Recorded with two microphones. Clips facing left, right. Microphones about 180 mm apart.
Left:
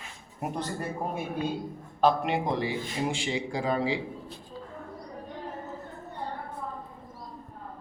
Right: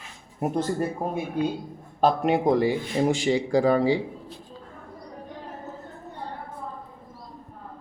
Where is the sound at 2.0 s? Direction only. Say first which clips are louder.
Right 4 dB; 45° right (ahead or behind).